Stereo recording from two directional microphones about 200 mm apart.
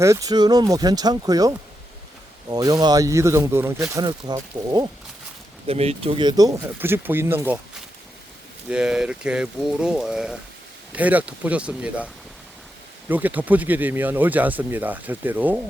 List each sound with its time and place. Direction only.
0.0 s speech: 15° right (ahead or behind)
5.6 s speech: 30° right (ahead or behind); by 7.6 s 10° right (ahead or behind)
8.7 s speech: 5° right (ahead or behind)